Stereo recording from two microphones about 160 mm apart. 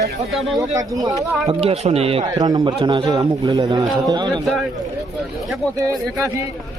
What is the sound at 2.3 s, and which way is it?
A man's voice, 25° right (ahead or behind).